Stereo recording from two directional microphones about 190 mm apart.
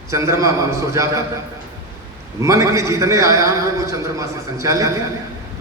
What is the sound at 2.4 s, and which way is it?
A man's voice, 15° right (ahead or behind).